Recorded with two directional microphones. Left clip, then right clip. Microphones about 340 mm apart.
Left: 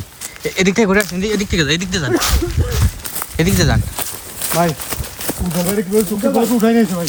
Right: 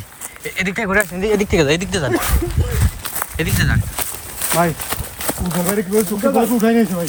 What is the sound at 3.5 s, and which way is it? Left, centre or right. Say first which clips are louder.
Speech: left 3 dB; centre.